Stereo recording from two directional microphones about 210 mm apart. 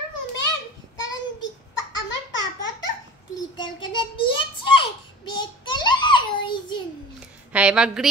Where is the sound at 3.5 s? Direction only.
20° left (ahead or behind).